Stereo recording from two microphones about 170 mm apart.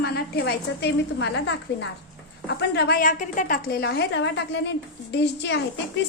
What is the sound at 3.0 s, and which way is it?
A woman's voice, 50° left (ahead or behind).